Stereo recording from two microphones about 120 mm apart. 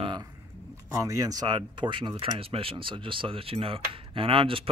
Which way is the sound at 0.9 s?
25° right (ahead or behind).